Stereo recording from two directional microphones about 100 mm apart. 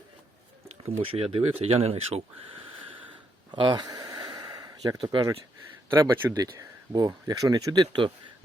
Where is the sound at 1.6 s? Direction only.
85° right.